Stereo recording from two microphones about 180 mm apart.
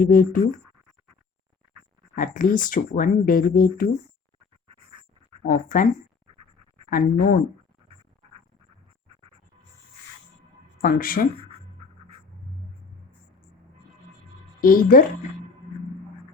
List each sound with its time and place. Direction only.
0.0 s speech: 50° left (ahead or behind)
2.1 s speech: 50° left (ahead or behind)
5.4 s speech: 45° left (ahead or behind)
6.9 s speech: 50° left (ahead or behind)
10.8 s speech: 55° left (ahead or behind)
14.6 s speech: 55° left (ahead or behind)